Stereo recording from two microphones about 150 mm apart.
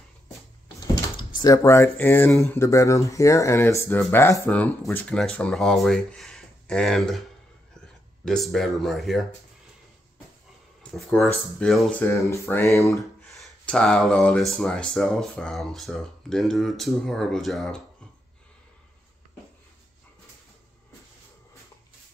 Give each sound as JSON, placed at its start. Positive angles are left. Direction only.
{"t": 1.4, "sound": "speech", "side_deg": 20}
{"t": 10.8, "sound": "speech", "side_deg": 5}
{"t": 12.0, "sound": "speech", "side_deg": 15}
{"t": 12.9, "sound": "speech", "side_deg": 0}